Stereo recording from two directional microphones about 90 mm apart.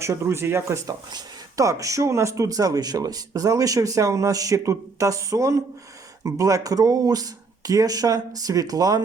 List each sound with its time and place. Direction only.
0.0 s speech: 30° right (ahead or behind)